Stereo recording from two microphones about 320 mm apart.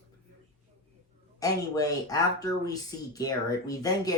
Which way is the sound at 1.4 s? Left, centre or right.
Centre.